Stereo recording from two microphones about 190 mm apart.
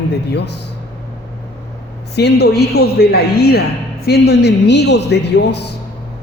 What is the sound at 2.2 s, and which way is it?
Music, 60° left (ahead or behind).